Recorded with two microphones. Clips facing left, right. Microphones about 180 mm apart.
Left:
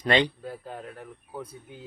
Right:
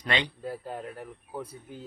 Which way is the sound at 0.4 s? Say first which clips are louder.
Right 2 dB; 5° right (ahead or behind).